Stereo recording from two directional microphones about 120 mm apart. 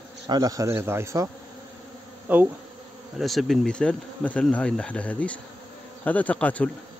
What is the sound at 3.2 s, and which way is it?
Speech, centre (ahead or behind).